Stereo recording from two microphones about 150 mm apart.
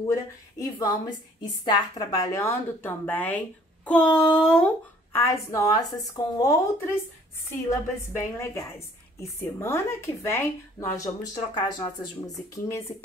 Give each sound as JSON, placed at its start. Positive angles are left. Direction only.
{"t": 0.0, "sound": "a woman's voice", "side_deg": 25}
{"t": 5.1, "sound": "a woman's voice", "side_deg": 20}
{"t": 11.3, "sound": "speech", "side_deg": 30}
{"t": 12.2, "sound": "speech", "side_deg": 20}